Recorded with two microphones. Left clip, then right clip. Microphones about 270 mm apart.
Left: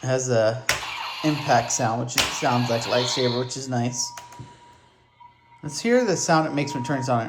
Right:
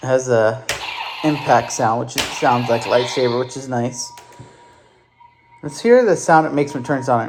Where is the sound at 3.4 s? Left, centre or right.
Centre.